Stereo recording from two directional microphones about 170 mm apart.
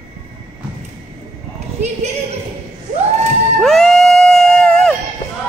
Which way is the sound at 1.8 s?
40° right (ahead or behind).